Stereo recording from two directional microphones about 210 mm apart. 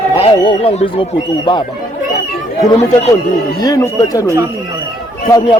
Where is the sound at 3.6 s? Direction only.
15° left (ahead or behind).